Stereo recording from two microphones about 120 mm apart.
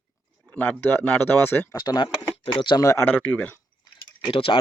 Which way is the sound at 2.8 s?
25° left (ahead or behind).